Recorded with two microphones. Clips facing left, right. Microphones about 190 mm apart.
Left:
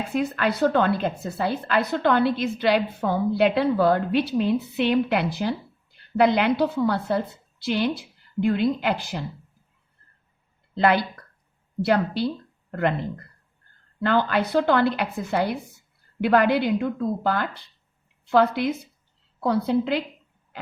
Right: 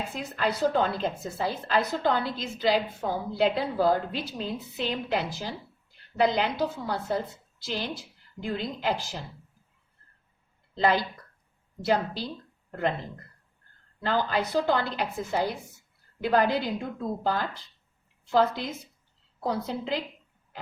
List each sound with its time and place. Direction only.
0.1 s a woman's voice: 65° left (ahead or behind)
10.8 s a woman's voice: 65° left (ahead or behind)
14.0 s a woman's voice: 65° left (ahead or behind)